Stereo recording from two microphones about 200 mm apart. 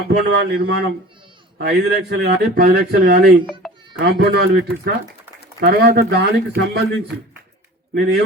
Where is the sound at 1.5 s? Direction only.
55° right (ahead or behind).